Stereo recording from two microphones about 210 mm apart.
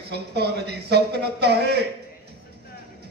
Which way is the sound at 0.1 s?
50° right (ahead or behind).